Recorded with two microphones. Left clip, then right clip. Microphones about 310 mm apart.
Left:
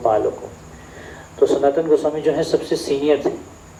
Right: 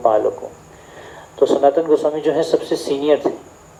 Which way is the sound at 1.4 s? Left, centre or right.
Right.